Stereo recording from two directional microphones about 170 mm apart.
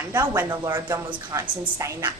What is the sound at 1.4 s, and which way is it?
Speech, 15° right (ahead or behind).